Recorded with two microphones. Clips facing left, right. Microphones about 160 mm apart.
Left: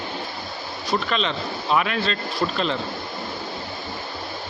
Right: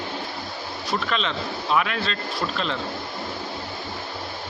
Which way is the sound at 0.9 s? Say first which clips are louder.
Left 2 dB; centre (ahead or behind).